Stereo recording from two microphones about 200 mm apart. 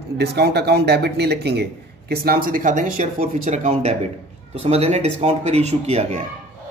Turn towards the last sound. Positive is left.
turn(degrees=-35)  # may be behind; listen again after turning